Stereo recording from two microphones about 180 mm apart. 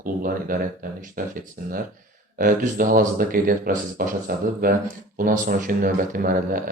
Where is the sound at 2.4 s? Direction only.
50° right (ahead or behind).